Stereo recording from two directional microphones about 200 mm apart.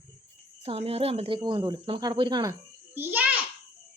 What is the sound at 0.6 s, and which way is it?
Speech, 30° right (ahead or behind).